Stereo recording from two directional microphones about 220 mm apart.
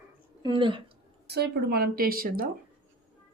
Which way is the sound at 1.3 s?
45° right (ahead or behind).